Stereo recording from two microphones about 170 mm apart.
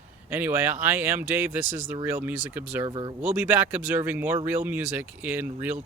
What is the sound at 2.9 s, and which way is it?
Speech, 25° right (ahead or behind).